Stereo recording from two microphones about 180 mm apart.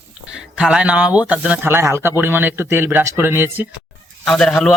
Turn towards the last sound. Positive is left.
turn(degrees=5)  # may be behind; listen again after turning